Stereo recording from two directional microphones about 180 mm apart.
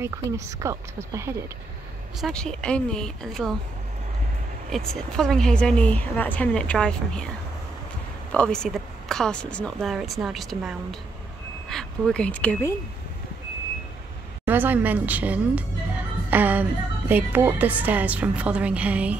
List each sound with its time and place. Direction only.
0.0 s a woman's voice: 15° right (ahead or behind)
2.1 s speech: centre (ahead or behind)
4.6 s speech: centre (ahead or behind)
8.3 s speech: 5° left (ahead or behind)
14.4 s a woman's voice: 10° right (ahead or behind)
16.3 s music: 10° right (ahead or behind)
17.1 s a woman's voice: 10° right (ahead or behind)